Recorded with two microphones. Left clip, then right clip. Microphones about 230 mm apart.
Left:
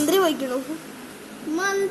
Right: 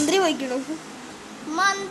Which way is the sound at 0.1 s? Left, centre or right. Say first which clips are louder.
Left 1 dB; centre.